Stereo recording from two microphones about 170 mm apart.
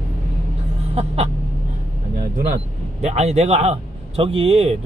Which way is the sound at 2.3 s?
45° right (ahead or behind).